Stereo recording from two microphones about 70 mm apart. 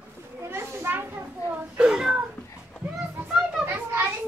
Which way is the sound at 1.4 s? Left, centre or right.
Left.